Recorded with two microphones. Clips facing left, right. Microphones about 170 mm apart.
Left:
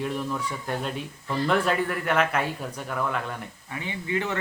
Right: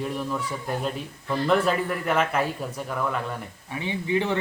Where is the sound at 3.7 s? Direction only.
20° right (ahead or behind).